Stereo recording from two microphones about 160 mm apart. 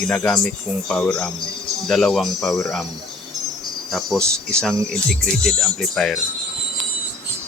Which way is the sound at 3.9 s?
5° left (ahead or behind).